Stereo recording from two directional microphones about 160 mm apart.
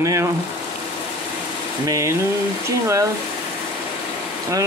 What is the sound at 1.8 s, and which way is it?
Speech, 20° right (ahead or behind).